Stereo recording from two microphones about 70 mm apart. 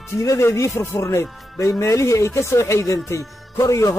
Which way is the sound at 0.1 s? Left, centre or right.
Left.